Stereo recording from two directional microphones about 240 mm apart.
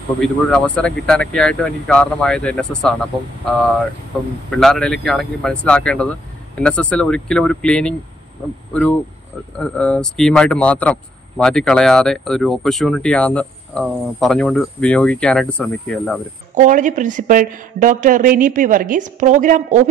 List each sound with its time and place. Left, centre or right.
0.2 s speech: centre
4.6 s speech: centre
9.6 s speech: centre
16.5 s speech: right